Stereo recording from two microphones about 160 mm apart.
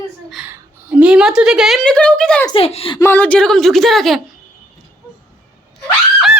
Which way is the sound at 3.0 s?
10° left (ahead or behind).